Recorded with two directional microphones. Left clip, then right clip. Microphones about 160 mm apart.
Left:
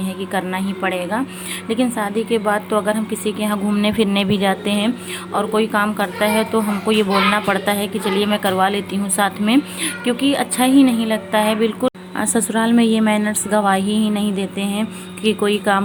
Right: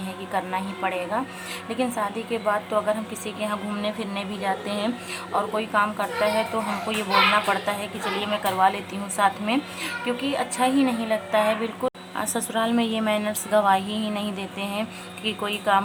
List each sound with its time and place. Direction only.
0.3 s a woman's voice: 15° left (ahead or behind)
7.4 s a woman's voice: 25° left (ahead or behind)